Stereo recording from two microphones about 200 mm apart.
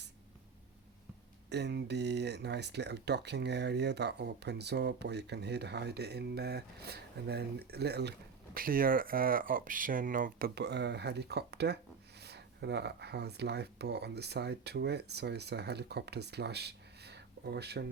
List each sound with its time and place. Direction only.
1.5 s speech: 60° right (ahead or behind)